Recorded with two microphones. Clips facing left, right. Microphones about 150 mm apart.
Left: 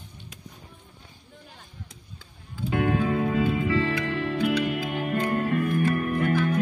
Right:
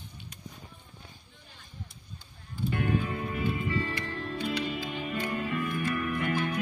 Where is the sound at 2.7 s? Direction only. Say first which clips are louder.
Left 7 dB; 90° left.